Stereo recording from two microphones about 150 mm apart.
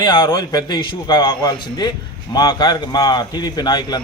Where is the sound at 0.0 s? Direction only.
30° left (ahead or behind).